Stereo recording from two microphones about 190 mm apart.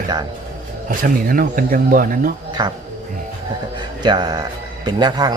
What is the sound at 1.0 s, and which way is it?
Speech, 50° right (ahead or behind).